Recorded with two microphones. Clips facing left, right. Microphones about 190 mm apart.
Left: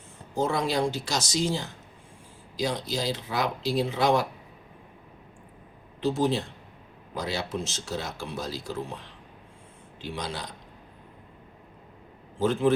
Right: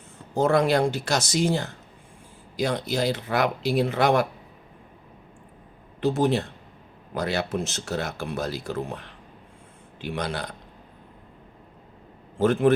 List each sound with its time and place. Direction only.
0.3 s speech: 60° right (ahead or behind)
6.0 s speech: 60° right (ahead or behind)
12.4 s speech: 60° right (ahead or behind)